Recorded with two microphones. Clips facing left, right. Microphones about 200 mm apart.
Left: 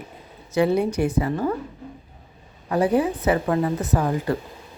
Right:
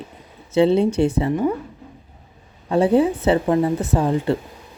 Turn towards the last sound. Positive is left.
turn(degrees=-25)  # may be behind; listen again after turning